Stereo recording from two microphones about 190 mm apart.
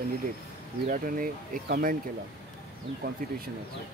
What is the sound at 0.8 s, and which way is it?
Speech, 45° right (ahead or behind).